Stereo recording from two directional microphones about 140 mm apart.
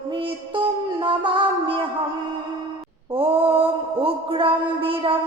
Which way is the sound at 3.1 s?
40° right (ahead or behind).